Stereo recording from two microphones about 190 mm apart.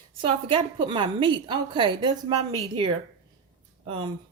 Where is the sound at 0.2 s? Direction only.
30° right (ahead or behind).